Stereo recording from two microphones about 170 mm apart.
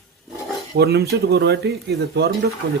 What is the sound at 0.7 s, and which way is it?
Speech, 70° right (ahead or behind).